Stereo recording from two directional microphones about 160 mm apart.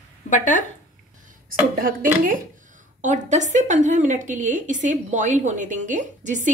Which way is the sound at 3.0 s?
50° right (ahead or behind).